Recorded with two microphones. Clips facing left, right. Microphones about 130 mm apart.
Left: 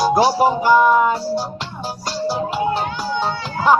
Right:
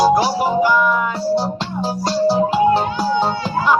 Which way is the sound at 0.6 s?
35° left (ahead or behind).